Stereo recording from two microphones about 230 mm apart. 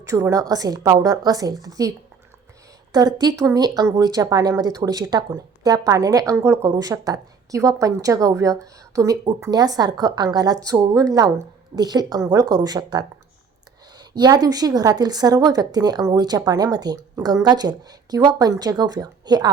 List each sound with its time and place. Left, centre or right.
0.0 s speech: centre
2.9 s speech: centre